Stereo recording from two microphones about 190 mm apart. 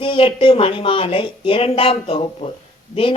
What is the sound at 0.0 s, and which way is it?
Speech, 25° left (ahead or behind).